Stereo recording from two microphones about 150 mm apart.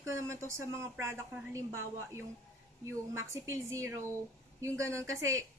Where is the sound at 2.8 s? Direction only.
20° right (ahead or behind).